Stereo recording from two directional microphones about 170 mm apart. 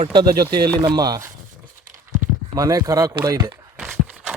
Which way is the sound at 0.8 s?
25° right (ahead or behind).